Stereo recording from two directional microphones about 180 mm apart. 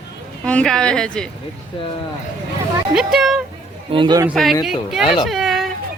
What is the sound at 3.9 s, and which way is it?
Speech, 25° right (ahead or behind).